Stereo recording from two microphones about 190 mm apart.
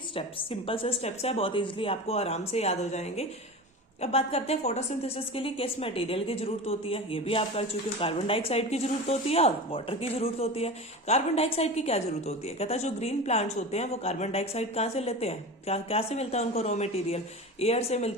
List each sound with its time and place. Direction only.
0.1 s a woman's voice: 30° left (ahead or behind)